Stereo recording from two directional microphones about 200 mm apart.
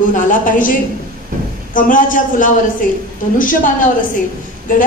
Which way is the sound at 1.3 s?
45° right (ahead or behind).